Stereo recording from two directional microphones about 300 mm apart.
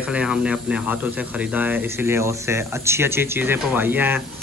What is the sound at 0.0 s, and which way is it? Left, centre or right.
Speech, centre.